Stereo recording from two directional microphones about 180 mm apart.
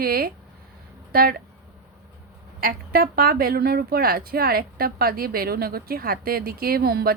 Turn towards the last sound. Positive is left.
turn(degrees=-60)  # may be behind; listen again after turning